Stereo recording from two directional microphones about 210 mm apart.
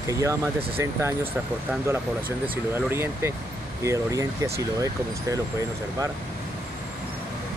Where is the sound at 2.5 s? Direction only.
10° right (ahead or behind).